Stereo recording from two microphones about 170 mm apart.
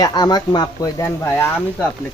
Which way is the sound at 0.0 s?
25° left (ahead or behind).